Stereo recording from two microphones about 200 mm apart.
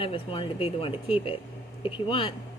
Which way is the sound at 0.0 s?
25° left (ahead or behind).